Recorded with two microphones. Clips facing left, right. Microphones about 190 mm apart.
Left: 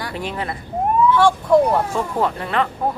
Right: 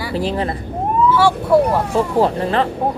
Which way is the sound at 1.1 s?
5° right (ahead or behind).